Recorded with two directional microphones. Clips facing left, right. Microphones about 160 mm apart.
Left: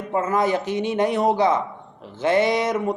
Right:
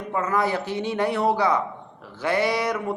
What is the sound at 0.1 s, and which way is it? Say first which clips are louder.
A man's voice: left 3 dB; 25° left (ahead or behind).